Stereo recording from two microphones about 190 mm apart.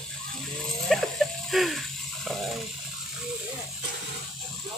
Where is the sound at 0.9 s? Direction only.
Centre (ahead or behind).